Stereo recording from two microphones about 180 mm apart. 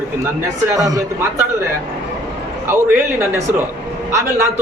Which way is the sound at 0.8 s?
20° right (ahead or behind).